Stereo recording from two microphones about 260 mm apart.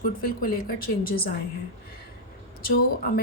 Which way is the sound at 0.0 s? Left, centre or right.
Left.